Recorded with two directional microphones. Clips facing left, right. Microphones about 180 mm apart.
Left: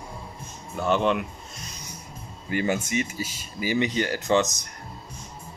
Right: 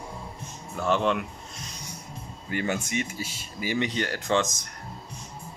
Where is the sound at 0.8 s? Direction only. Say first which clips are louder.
Left 2 dB; centre (ahead or behind).